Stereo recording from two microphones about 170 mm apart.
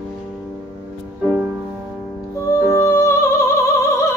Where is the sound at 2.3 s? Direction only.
15° left (ahead or behind).